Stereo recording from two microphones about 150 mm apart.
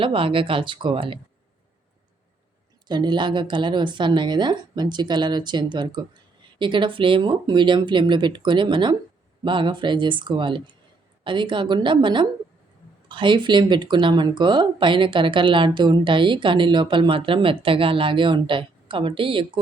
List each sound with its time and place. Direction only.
0.0 s speech: 35° right (ahead or behind)
2.8 s speech: 30° right (ahead or behind)